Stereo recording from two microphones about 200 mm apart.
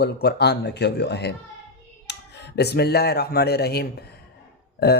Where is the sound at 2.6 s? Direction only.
55° left (ahead or behind).